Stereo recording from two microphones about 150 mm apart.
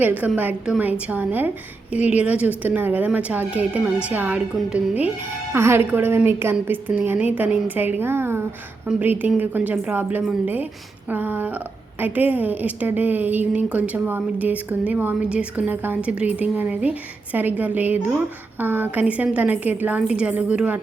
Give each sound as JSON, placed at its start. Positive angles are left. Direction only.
{"t": 0.2, "sound": "a woman's voice", "side_deg": -10}